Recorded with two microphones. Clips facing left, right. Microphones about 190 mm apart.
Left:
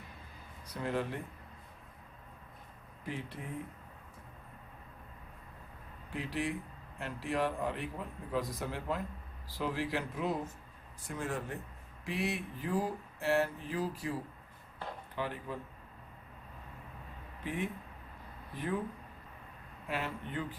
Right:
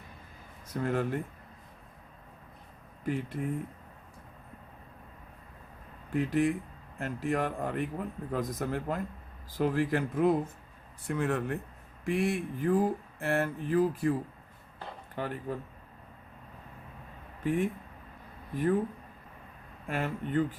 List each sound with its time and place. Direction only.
0.7 s speech: 50° right (ahead or behind)
3.0 s speech: 50° right (ahead or behind)
6.1 s speech: 50° right (ahead or behind)
11.0 s speech: 65° right (ahead or behind)
12.0 s speech: 50° right (ahead or behind)
17.4 s speech: 50° right (ahead or behind)
19.9 s speech: 50° right (ahead or behind)